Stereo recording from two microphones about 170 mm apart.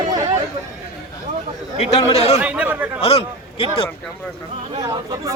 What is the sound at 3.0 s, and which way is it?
Speech, 35° left (ahead or behind).